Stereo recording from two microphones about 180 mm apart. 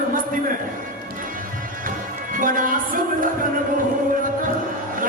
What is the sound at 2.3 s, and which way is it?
Music, 50° right (ahead or behind).